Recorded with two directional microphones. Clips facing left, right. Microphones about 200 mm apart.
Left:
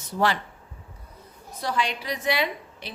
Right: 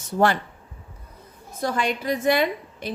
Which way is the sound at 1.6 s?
50° right (ahead or behind).